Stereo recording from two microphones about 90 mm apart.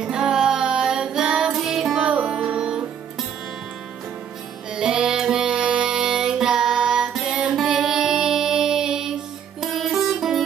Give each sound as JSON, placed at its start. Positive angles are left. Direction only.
{"t": 0.0, "sound": "music", "side_deg": -10}
{"t": 4.7, "sound": "music", "side_deg": -5}